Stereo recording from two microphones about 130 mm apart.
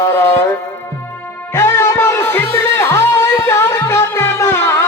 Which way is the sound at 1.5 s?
20° left (ahead or behind).